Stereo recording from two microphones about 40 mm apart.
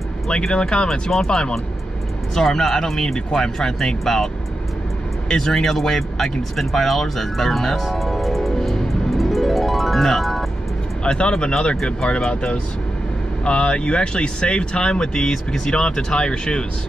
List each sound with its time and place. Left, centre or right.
0.5 s speech: left; by 4.3 s centre
5.3 s speech: centre
11.1 s speech: left
11.7 s speech: centre
12.3 s speech: left